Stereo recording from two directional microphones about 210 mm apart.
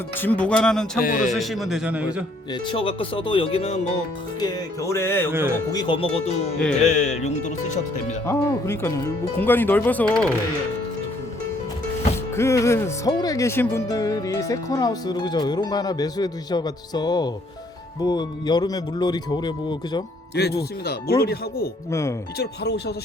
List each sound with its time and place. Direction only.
0.2 s a man's voice: 5° left (ahead or behind)
0.9 s speech: 40° left (ahead or behind)
1.3 s a man's voice: centre (ahead or behind)
2.5 s speech: 25° left (ahead or behind)
4.4 s speech: 20° left (ahead or behind)
5.3 s speech: 10° right (ahead or behind)
5.7 s speech: 20° left (ahead or behind)
8.3 s speech: 10° left (ahead or behind)
12.4 s speech: 15° left (ahead or behind)
20.3 s speech: 50° left (ahead or behind)
21.8 s speech: 15° left (ahead or behind)
22.4 s speech: 50° left (ahead or behind)